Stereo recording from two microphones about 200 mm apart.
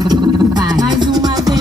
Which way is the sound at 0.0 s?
20° right (ahead or behind).